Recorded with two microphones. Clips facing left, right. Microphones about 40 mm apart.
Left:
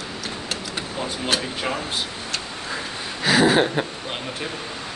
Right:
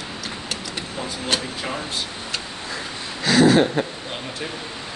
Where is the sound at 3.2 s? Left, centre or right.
Centre.